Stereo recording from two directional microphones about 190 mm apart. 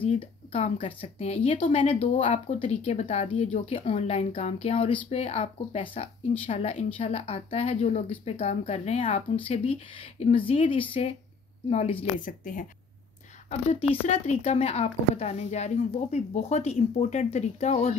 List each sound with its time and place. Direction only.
0.2 s speech: 30° left (ahead or behind)
12.2 s a woman's voice: 45° left (ahead or behind)
13.5 s speech: 35° left (ahead or behind)